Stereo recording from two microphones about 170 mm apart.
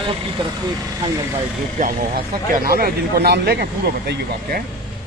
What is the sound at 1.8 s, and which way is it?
Speech, 60° right (ahead or behind).